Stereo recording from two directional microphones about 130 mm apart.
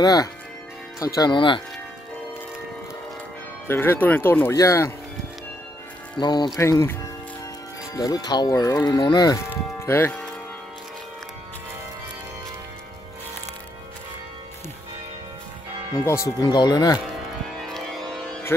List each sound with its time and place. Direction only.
0.0 s speech: 30° left (ahead or behind)
3.6 s speech: 20° left (ahead or behind)
6.1 s speech: 35° left (ahead or behind)
6.6 s speech: 20° left (ahead or behind)
9.8 s speech: 20° left (ahead or behind)
16.0 s speech: 20° left (ahead or behind)
17.6 s music: 5° left (ahead or behind)